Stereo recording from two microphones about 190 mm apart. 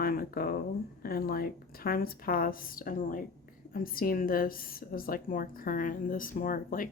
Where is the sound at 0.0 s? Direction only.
50° left (ahead or behind).